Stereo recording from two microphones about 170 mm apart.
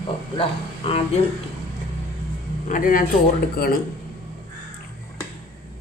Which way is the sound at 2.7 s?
50° left (ahead or behind).